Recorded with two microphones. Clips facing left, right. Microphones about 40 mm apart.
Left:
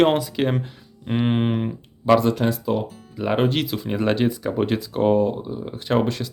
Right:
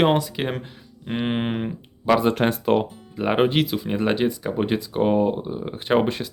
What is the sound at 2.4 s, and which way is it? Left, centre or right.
Speech, right.